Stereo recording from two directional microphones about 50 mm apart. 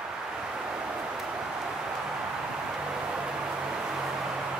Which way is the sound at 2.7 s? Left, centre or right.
Centre.